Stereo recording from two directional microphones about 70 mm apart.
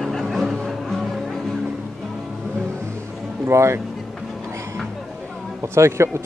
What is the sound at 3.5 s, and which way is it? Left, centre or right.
Speech, right.